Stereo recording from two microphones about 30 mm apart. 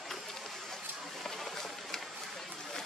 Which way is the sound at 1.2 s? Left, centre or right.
Centre.